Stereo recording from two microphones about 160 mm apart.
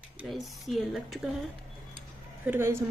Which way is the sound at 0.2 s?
Centre (ahead or behind).